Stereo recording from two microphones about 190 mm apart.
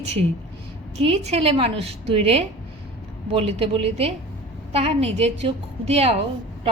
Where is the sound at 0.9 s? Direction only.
35° right (ahead or behind).